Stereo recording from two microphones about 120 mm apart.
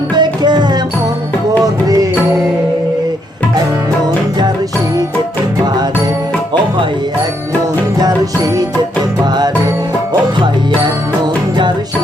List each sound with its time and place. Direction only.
0.2 s music: 40° right (ahead or behind)
1.6 s music: 30° right (ahead or behind)
8.0 s music: 30° right (ahead or behind)